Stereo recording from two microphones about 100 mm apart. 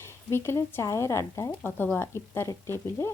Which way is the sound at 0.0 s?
25° left (ahead or behind).